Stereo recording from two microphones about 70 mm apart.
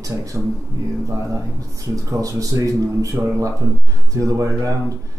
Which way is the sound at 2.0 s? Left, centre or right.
Right.